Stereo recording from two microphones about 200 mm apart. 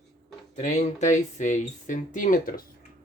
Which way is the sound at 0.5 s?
35° left (ahead or behind).